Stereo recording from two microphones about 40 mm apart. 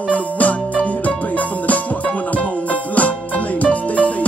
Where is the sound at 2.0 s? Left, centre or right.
Left.